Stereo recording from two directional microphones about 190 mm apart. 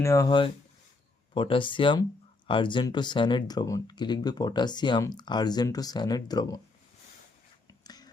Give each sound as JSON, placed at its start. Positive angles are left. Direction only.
{"t": 0.0, "sound": "speech", "side_deg": 15}
{"t": 7.7, "sound": "whispering", "side_deg": 20}